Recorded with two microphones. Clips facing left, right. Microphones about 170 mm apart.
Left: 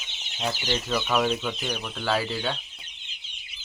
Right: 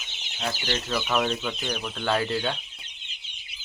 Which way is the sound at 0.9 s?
Centre (ahead or behind).